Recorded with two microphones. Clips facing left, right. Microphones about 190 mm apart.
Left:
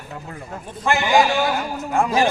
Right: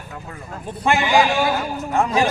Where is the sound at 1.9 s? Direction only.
5° left (ahead or behind).